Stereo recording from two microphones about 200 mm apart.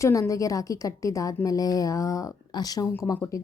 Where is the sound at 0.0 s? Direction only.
15° left (ahead or behind).